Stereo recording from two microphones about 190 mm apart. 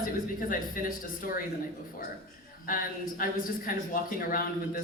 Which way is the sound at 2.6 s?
45° left (ahead or behind).